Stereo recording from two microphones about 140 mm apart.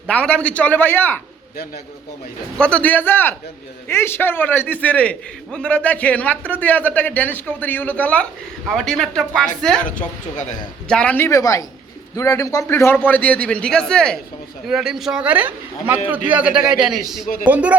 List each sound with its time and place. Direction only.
0.1 s a man's voice: 10° left (ahead or behind)
2.6 s a man's voice: 10° left (ahead or behind)
10.8 s a man's voice: 5° left (ahead or behind)
11.3 s a woman's voice: 20° left (ahead or behind); by 17.7 s 10° right (ahead or behind)